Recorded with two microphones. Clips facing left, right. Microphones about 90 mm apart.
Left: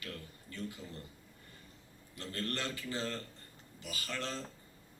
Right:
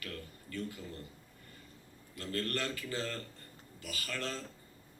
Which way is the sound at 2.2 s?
20° left (ahead or behind).